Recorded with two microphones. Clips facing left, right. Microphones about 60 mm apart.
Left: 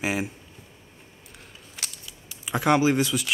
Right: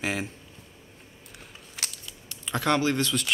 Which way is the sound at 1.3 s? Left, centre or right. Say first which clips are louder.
Right 1 dB; centre.